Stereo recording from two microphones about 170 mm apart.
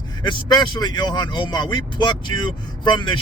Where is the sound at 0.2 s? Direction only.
25° left (ahead or behind).